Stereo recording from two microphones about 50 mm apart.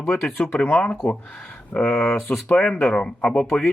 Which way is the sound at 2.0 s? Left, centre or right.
Left.